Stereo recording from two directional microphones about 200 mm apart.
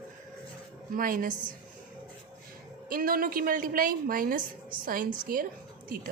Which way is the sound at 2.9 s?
45° right (ahead or behind).